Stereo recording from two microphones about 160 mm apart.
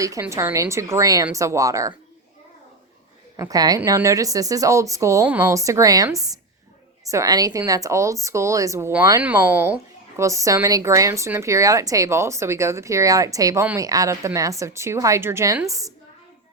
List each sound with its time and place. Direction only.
0.0 s speech: 20° right (ahead or behind)
3.3 s speech: 25° right (ahead or behind)